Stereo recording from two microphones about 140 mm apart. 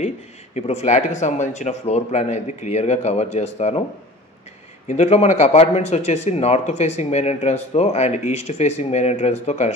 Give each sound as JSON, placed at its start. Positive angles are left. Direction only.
{"t": 0.6, "sound": "speech", "side_deg": 55}
{"t": 4.8, "sound": "speech", "side_deg": 55}